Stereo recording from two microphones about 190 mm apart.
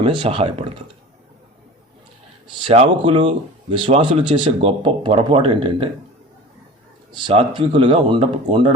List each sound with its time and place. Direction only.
0.0 s speech: 25° right (ahead or behind)
2.6 s speech: 25° right (ahead or behind)
7.2 s speech: 25° right (ahead or behind)